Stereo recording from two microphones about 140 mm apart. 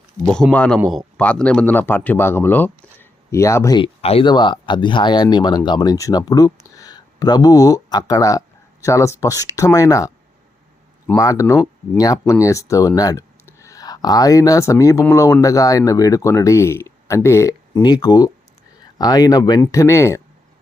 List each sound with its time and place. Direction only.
0.3 s a man's voice: 5° left (ahead or behind); by 3.8 s 20° left (ahead or behind)
3.8 s speech: 40° left (ahead or behind); by 10.1 s 25° left (ahead or behind)
11.2 s speech: 25° left (ahead or behind)